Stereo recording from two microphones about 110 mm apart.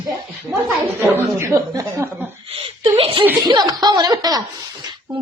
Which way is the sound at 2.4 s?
60° right (ahead or behind).